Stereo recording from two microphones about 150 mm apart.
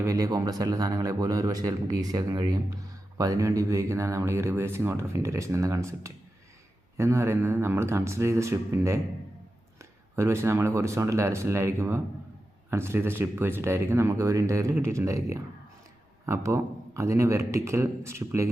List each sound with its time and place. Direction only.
0.0 s speech: 20° right (ahead or behind)